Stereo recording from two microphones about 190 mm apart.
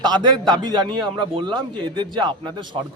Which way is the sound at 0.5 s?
20° right (ahead or behind).